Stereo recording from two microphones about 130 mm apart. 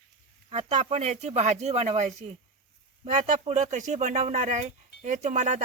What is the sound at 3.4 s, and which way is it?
Speech, 65° right (ahead or behind).